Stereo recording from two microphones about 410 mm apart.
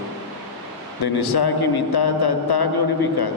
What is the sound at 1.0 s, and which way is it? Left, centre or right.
A man's voice, left.